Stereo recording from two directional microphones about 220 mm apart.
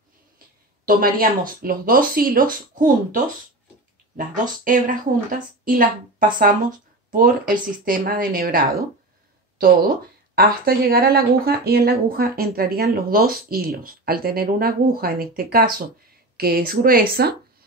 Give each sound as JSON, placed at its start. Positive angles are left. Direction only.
{"t": 0.8, "sound": "a woman's voice", "side_deg": -40}
{"t": 4.6, "sound": "a woman's voice", "side_deg": -40}
{"t": 10.3, "sound": "speech", "side_deg": -40}